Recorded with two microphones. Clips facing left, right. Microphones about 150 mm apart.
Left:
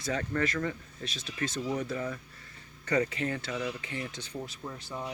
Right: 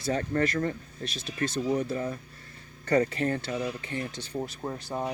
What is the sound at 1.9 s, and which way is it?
Speech, 35° right (ahead or behind).